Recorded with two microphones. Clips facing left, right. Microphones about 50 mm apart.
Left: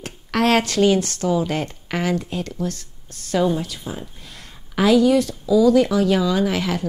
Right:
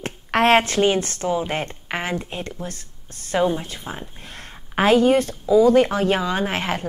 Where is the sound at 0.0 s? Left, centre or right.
Right.